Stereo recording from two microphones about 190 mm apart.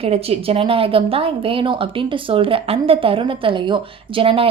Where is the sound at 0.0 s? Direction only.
30° right (ahead or behind).